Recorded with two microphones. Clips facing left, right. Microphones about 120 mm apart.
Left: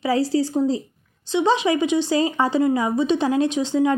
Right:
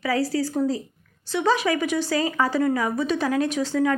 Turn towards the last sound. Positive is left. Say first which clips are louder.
# left 3 dB
turn(degrees=20)  # may be behind; listen again after turning